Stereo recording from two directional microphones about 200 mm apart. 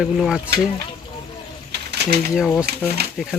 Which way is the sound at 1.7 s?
55° right (ahead or behind).